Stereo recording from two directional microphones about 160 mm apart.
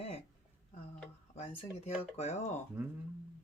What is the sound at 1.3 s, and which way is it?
Speech, 40° left (ahead or behind).